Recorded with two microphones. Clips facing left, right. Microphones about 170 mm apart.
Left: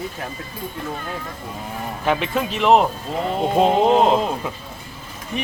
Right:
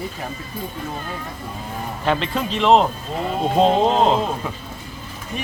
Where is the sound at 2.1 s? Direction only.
10° left (ahead or behind).